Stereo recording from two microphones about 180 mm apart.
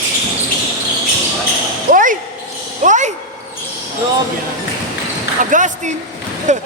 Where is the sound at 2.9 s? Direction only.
40° right (ahead or behind).